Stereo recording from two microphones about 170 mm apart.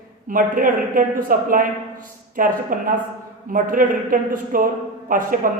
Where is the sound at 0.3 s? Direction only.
55° right (ahead or behind).